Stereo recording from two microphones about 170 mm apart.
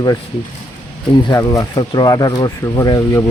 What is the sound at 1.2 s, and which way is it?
Speech, 20° left (ahead or behind).